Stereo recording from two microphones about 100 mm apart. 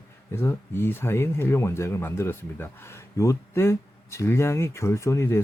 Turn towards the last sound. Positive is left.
turn(degrees=25)  # may be behind; listen again after turning